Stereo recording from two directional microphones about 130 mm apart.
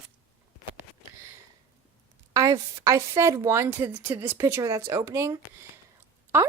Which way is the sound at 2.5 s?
25° right (ahead or behind).